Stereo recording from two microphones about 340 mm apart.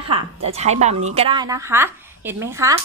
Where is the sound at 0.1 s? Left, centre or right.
Centre.